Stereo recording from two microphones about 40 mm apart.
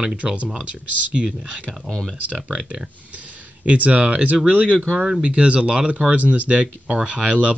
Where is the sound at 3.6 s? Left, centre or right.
Right.